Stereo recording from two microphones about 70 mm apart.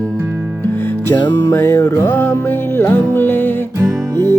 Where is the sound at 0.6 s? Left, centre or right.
Left.